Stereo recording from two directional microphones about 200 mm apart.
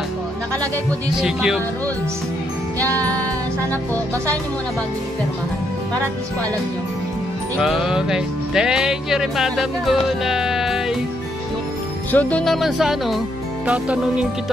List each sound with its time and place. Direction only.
1.2 s speech: centre (ahead or behind)
2.9 s music: 5° left (ahead or behind)
7.5 s speech: centre (ahead or behind)
12.1 s speech: 10° left (ahead or behind)